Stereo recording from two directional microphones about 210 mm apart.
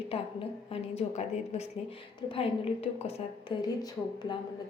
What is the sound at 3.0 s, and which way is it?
Speech, 25° left (ahead or behind).